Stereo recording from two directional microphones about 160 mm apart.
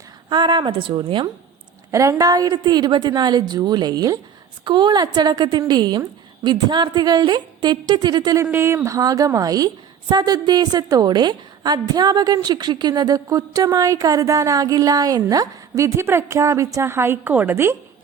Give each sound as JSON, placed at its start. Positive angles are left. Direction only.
{"t": 0.3, "sound": "a woman's voice", "side_deg": -30}
{"t": 1.9, "sound": "a woman's voice", "side_deg": -20}